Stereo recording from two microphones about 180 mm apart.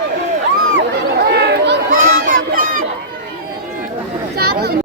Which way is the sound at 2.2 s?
50° right (ahead or behind).